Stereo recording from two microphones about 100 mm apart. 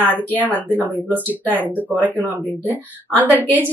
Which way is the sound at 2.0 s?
20° right (ahead or behind).